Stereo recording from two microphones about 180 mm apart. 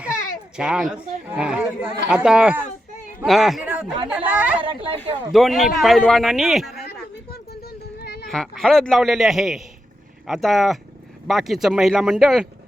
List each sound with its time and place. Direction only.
0.5 s speech: 5° right (ahead or behind)
4.6 s speech: 30° right (ahead or behind)
5.3 s speech: centre (ahead or behind)
8.3 s speech: centre (ahead or behind)